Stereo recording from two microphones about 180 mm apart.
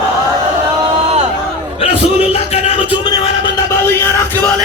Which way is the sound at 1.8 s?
35° left (ahead or behind).